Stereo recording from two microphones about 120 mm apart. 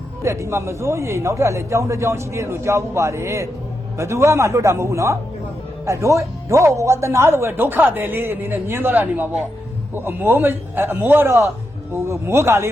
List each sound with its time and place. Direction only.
0.2 s a man's voice: 25° right (ahead or behind)